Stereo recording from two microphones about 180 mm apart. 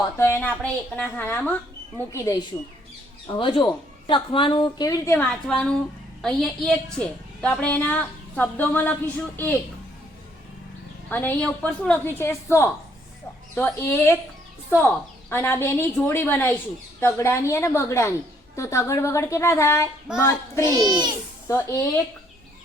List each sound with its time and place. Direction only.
0.2 s a woman's voice: 15° left (ahead or behind)
3.2 s a woman's voice: 30° left (ahead or behind); by 9.5 s 10° left (ahead or behind)
11.1 s a woman's voice: 10° left (ahead or behind)
20.6 s a child's voice: 20° right (ahead or behind)
21.4 s speech: 15° left (ahead or behind)